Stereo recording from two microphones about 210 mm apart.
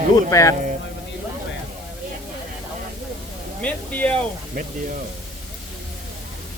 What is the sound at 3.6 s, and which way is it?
Speech, 5° left (ahead or behind).